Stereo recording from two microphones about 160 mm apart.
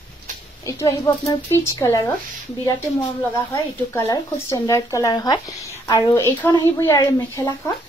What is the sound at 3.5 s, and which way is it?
Speech, 20° left (ahead or behind).